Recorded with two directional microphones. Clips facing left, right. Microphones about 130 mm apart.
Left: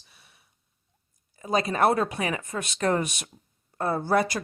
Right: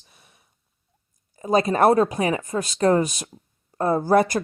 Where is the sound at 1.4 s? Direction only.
40° right (ahead or behind).